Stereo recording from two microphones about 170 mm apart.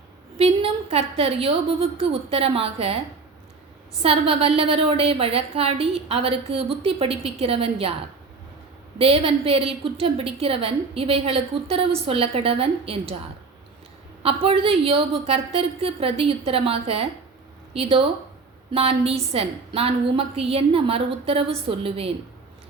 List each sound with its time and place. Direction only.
0.3 s a woman's voice: 35° right (ahead or behind)
4.0 s a woman's voice: 35° right (ahead or behind)
9.0 s a woman's voice: 35° right (ahead or behind)
14.2 s a woman's voice: 35° right (ahead or behind)